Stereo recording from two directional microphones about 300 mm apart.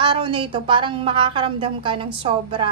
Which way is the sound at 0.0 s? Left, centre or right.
Centre.